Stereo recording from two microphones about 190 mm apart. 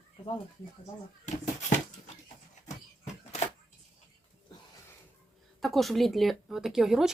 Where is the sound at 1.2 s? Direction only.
40° left (ahead or behind).